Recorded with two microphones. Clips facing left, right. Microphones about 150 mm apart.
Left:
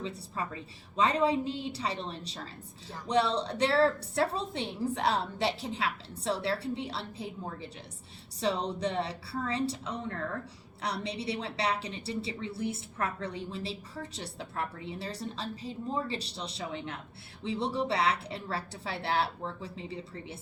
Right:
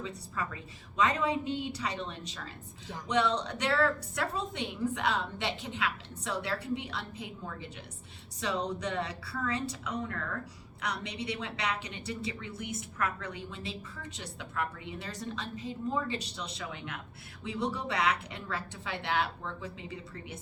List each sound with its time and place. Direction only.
0.0 s a woman's voice: 30° left (ahead or behind)